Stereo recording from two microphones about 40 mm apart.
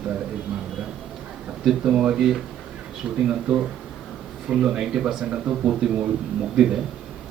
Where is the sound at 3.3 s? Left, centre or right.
Right.